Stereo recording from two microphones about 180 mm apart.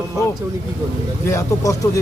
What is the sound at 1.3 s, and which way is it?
Speech, 15° left (ahead or behind).